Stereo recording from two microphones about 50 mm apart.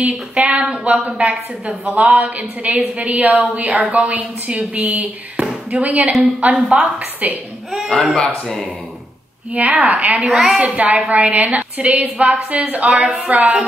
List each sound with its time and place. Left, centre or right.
0.0 s a woman's voice: right
0.9 s a woman's voice: centre
2.0 s a woman's voice: right
5.4 s basketball bounce: centre
5.8 s a woman's voice: right
7.7 s speech: centre
8.0 s speech: centre
9.5 s a woman's voice: right
10.2 s a woman's voice: centre
11.1 s a woman's voice: right
12.9 s a woman's voice: centre
13.2 s a woman's voice: right